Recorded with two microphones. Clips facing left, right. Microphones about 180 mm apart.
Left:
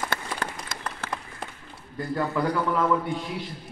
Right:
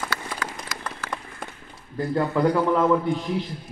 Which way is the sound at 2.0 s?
25° right (ahead or behind).